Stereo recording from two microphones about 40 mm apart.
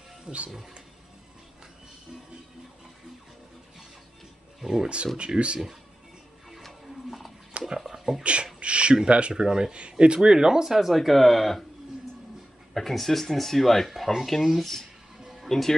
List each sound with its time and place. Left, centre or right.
0.2 s speech: right
4.6 s speech: centre
4.8 s speech: right
7.1 s a sound: centre
8.2 s speech: right
8.5 s a sound: right
9.0 s speech: right; by 10.9 s centre
10.9 s speech: centre
12.7 s speech: centre
15.1 s music: centre
15.4 s speech: centre